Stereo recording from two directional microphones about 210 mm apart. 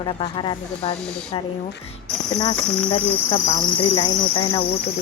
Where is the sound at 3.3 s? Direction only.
15° left (ahead or behind).